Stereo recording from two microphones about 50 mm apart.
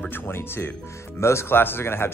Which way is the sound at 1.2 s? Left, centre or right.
Left.